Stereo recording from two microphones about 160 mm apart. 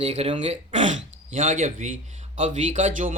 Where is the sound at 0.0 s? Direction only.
45° right (ahead or behind).